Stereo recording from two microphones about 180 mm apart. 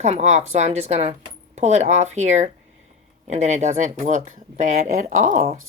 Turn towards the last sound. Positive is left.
turn(degrees=-45)  # may be behind; listen again after turning